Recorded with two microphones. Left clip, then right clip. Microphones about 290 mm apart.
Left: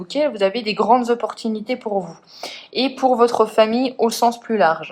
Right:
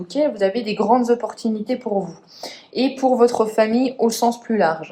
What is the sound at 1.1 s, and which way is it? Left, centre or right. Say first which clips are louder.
Speech: right 1 dB; centre.